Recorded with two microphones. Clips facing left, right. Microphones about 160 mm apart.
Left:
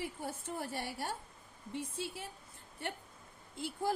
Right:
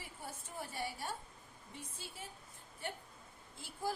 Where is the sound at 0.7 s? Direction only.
65° left (ahead or behind).